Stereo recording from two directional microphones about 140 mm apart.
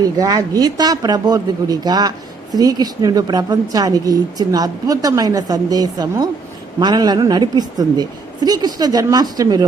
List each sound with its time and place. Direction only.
0.0 s speech: 25° right (ahead or behind)